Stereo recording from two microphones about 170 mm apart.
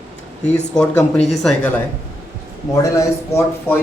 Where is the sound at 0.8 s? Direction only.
5° left (ahead or behind).